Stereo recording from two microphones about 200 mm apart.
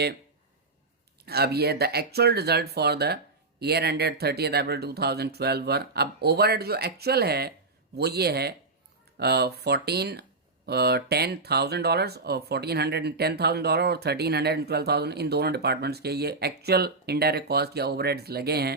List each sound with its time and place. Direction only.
1.2 s speech: 50° right (ahead or behind)